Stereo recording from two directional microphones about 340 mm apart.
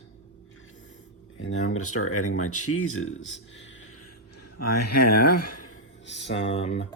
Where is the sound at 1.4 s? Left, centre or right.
Left.